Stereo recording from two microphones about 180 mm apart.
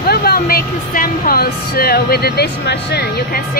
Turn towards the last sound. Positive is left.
turn(degrees=65)  # may be behind; listen again after turning